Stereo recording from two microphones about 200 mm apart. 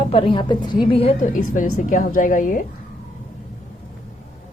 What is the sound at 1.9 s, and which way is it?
Speech, 45° left (ahead or behind).